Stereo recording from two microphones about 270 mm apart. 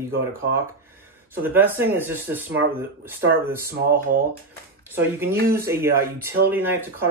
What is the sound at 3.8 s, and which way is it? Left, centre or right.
Speech, right.